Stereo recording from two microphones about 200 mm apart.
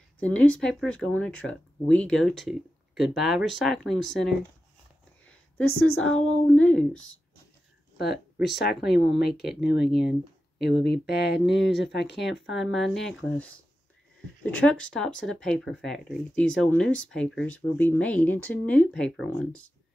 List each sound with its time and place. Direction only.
0.2 s speech: 5° left (ahead or behind)
5.6 s speech: 90° left
6.4 s speech: 5° left (ahead or behind)
6.9 s speech: 85° left
8.0 s speech: 55° left (ahead or behind)
9.8 s speech: centre (ahead or behind)
10.6 s speech: 55° left (ahead or behind)
12.5 s speech: centre (ahead or behind)